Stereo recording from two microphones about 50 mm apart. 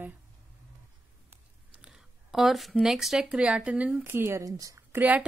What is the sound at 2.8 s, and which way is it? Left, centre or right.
Speech, centre.